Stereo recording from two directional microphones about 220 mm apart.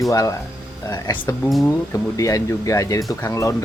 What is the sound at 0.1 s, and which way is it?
Speech, 15° left (ahead or behind).